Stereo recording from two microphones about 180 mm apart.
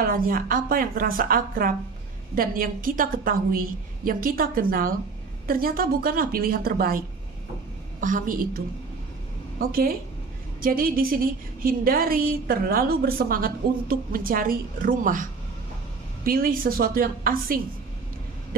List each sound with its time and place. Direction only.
0.0 s a woman's voice: 55° right (ahead or behind)
8.0 s a woman's voice: 50° right (ahead or behind)
16.3 s a woman's voice: 55° right (ahead or behind)